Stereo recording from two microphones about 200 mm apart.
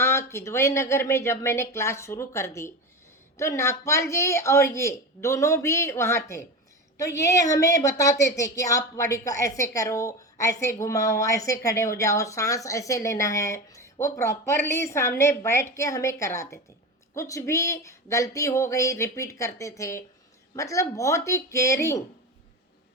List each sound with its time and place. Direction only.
0.0 s a woman's voice: 15° left (ahead or behind)